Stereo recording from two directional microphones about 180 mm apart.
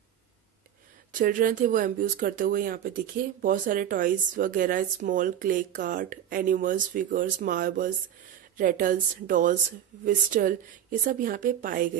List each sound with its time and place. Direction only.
1.1 s speech: 45° right (ahead or behind)